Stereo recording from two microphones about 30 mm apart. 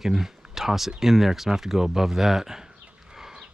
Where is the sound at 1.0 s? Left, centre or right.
Centre.